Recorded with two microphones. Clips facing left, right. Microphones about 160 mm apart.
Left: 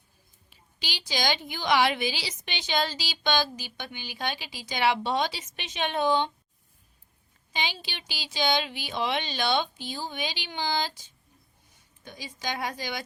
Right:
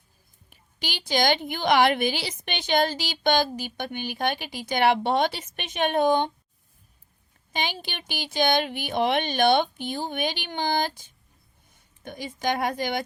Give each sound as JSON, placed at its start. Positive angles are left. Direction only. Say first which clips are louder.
{"t": 0.5, "sound": "a woman's voice", "louder": "right 4 dB", "side_deg": -50}
{"t": 7.5, "sound": "a woman's voice", "louder": "right 3 dB", "side_deg": -50}